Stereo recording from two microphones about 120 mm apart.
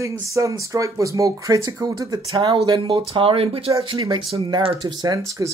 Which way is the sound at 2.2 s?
45° right (ahead or behind).